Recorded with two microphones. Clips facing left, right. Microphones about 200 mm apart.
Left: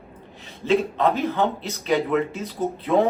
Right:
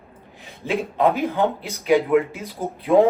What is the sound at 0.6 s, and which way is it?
Speech, 15° right (ahead or behind).